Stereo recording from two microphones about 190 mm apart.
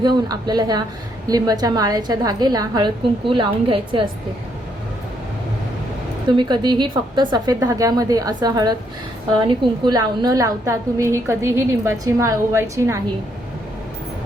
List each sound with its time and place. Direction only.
0.0 s a woman's voice: 20° right (ahead or behind)
6.3 s a woman's voice: 25° right (ahead or behind)
9.8 s a woman's voice: 20° right (ahead or behind)